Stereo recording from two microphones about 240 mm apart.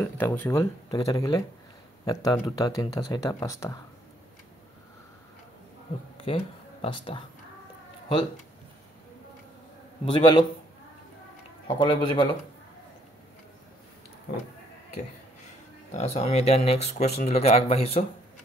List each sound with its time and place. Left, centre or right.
0.2 s speech: centre
6.1 s speech: left
10.0 s speech: left
11.6 s speech: centre
15.9 s speech: left